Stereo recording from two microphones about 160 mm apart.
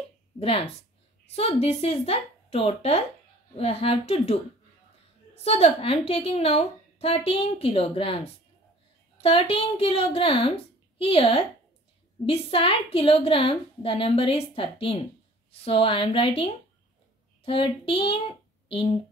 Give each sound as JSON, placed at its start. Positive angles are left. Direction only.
{"t": 0.4, "sound": "a woman's voice", "side_deg": 35}
{"t": 5.4, "sound": "a woman's voice", "side_deg": 40}
{"t": 9.2, "sound": "a woman's voice", "side_deg": 35}